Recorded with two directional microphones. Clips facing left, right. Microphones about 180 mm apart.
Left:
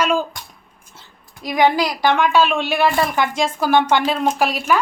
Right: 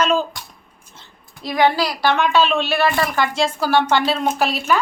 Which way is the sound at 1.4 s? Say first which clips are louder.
Left 1 dB; 15° left (ahead or behind).